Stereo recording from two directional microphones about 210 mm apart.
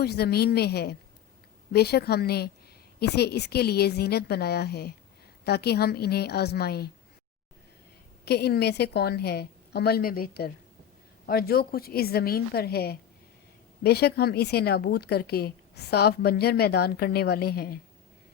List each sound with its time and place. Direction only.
0.0 s a woman's voice: 50° left (ahead or behind)
8.2 s a woman's voice: 50° left (ahead or behind)